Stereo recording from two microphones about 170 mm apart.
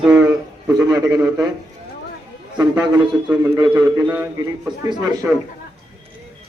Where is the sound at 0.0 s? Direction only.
10° right (ahead or behind).